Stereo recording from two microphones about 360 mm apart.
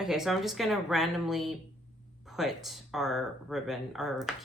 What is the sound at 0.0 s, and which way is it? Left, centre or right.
Speech, centre.